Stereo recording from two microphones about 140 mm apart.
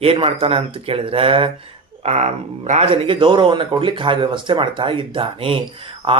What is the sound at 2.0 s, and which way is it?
A man's voice, 55° right (ahead or behind).